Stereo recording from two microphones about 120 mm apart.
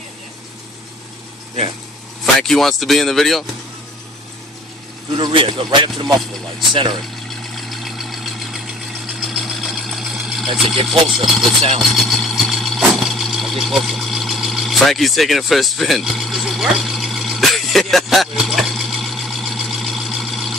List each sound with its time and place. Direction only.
2.4 s speech: centre (ahead or behind)
5.1 s speech: 40° right (ahead or behind)
7.2 s vehicle: centre (ahead or behind)
9.2 s a sound: centre (ahead or behind)
10.9 s speech: centre (ahead or behind)
11.9 s vehicle: centre (ahead or behind)